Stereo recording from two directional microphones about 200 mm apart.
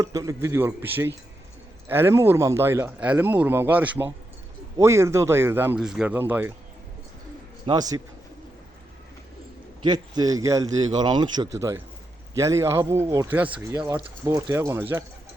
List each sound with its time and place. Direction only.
0.0 s speech: 15° right (ahead or behind)
7.6 s a man's voice: 20° right (ahead or behind)
9.8 s a man's voice: 20° right (ahead or behind)